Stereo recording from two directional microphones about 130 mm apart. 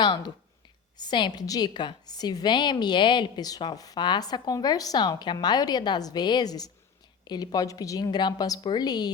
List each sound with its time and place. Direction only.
0.0 s a woman's voice: 35° left (ahead or behind)